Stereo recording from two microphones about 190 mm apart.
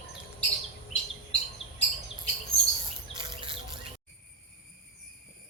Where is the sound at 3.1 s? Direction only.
25° right (ahead or behind).